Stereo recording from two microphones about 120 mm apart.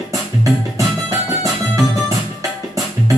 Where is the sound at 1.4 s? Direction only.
25° right (ahead or behind).